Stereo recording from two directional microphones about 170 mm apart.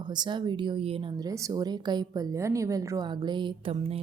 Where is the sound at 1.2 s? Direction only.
20° right (ahead or behind).